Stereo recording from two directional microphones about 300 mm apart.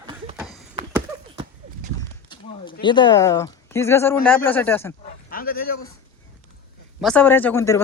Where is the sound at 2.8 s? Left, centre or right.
Centre.